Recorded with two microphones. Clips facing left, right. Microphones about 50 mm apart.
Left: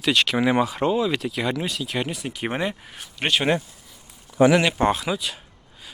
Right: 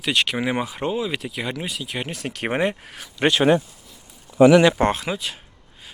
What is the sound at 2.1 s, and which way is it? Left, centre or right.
Speech, right.